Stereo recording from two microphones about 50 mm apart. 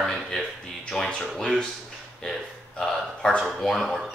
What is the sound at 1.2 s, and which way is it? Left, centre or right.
Speech, centre.